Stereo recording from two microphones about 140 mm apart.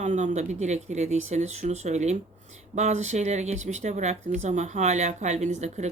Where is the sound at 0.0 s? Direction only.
60° right (ahead or behind).